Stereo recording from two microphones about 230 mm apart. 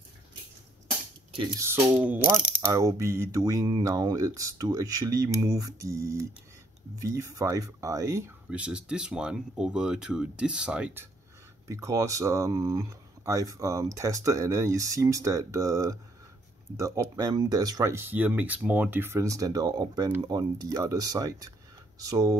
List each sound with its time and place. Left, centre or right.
1.6 s speech: centre